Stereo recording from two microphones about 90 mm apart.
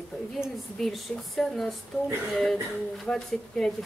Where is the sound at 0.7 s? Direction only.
5° left (ahead or behind).